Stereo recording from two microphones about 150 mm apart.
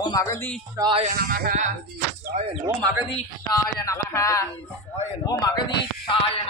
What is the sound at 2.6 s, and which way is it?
Speech, 20° right (ahead or behind).